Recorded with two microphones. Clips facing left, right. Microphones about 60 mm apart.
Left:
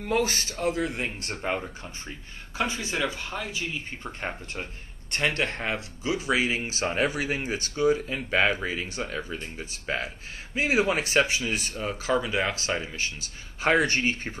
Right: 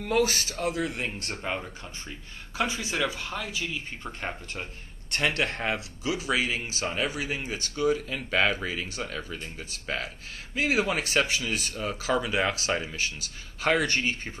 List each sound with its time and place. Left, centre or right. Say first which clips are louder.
0.2 s speech: right 1 dB; centre
0.9 s speech: left 1 dB; centre
2.5 s speech: even; centre
6.3 s speech: left 3 dB; centre
6.7 s speech: left 3 dB; left; by 13.0 s centre
13.7 s speech: left 3 dB; left